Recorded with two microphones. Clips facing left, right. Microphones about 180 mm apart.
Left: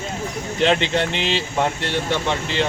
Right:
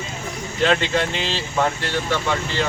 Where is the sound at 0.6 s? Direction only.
20° left (ahead or behind).